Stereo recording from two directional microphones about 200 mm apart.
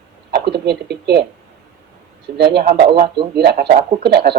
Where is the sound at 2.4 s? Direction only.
55° right (ahead or behind).